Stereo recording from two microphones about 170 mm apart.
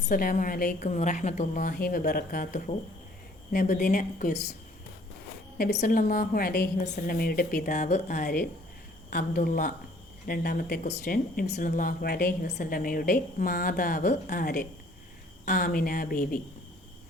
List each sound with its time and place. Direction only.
0.0 s a woman's voice: 55° left (ahead or behind)
5.8 s a woman's voice: 55° left (ahead or behind)
7.2 s a woman's voice: 65° left (ahead or behind)